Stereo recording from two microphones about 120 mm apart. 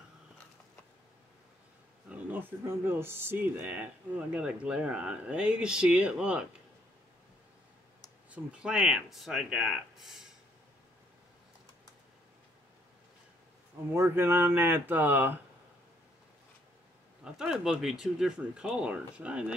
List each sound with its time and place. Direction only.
2.0 s speech: 15° right (ahead or behind)
8.3 s speech: 10° right (ahead or behind)
13.9 s speech: 20° right (ahead or behind)
17.2 s speech: 5° right (ahead or behind)